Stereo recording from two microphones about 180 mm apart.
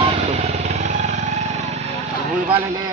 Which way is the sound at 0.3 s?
40° right (ahead or behind).